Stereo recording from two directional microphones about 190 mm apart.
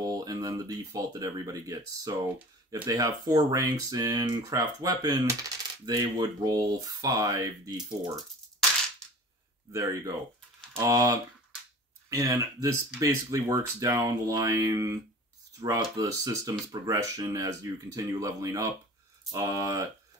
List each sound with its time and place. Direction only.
0.0 s speech: 20° right (ahead or behind)
9.7 s speech: 15° right (ahead or behind)